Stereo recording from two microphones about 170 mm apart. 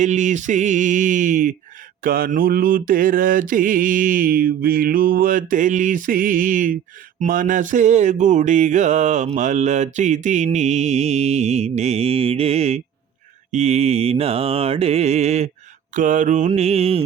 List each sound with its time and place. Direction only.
0.0 s mantra: 45° right (ahead or behind)